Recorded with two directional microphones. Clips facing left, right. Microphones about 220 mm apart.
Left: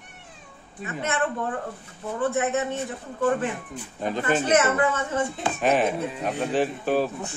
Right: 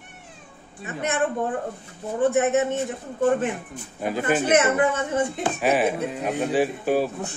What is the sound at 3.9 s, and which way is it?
Speech, 10° right (ahead or behind).